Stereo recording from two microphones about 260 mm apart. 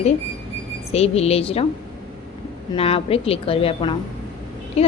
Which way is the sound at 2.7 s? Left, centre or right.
Left.